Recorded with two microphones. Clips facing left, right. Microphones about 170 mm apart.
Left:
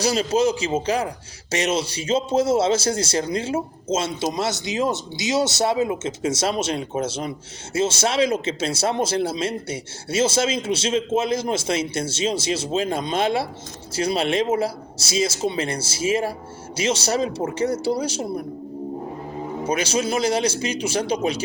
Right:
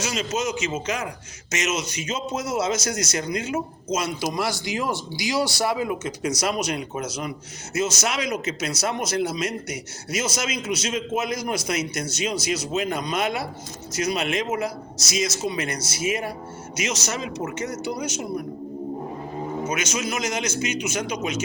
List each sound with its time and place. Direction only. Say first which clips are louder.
0.0 s a man's voice: left 7 dB; 35° left (ahead or behind)
19.6 s a man's voice: left 7 dB; 30° left (ahead or behind)